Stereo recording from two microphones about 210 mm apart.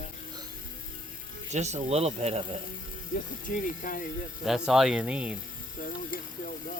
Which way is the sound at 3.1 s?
40° left (ahead or behind).